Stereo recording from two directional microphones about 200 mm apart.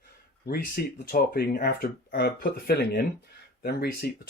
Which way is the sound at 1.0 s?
50° left (ahead or behind).